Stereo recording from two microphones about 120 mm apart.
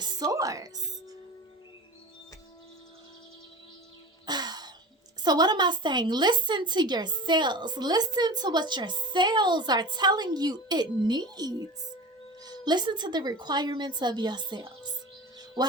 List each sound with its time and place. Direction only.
0.0 s music: 35° right (ahead or behind)
4.3 s music: 35° right (ahead or behind)
5.2 s a woman's voice: 35° right (ahead or behind)